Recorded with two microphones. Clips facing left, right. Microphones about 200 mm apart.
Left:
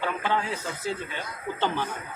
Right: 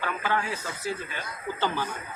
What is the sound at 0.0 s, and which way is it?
Speech, 20° left (ahead or behind).